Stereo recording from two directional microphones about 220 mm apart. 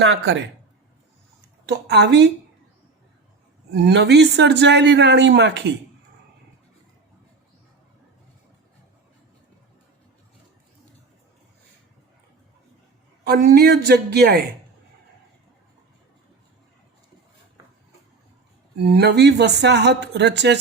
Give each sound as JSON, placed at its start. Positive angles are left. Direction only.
{"t": 0.0, "sound": "speech", "side_deg": -55}
{"t": 1.6, "sound": "speech", "side_deg": -50}
{"t": 3.8, "sound": "speech", "side_deg": -50}
{"t": 13.2, "sound": "speech", "side_deg": -45}
{"t": 18.8, "sound": "speech", "side_deg": -50}